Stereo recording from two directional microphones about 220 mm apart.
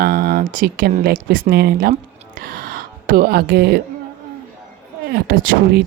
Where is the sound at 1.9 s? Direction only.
40° right (ahead or behind).